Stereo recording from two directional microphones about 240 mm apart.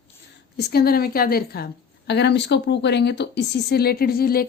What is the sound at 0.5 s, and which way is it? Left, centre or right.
A woman's voice, left.